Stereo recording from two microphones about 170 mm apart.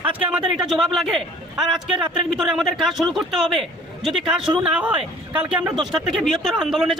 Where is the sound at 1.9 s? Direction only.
30° right (ahead or behind).